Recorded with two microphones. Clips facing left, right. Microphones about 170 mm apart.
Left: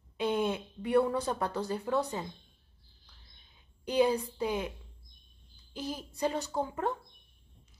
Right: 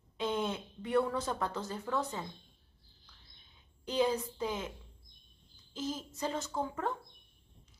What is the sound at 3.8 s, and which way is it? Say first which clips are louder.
Speech: left 4 dB; 15° left (ahead or behind).